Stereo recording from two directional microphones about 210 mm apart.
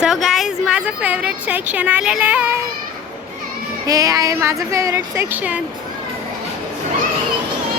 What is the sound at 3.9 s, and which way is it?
Speech, 15° right (ahead or behind).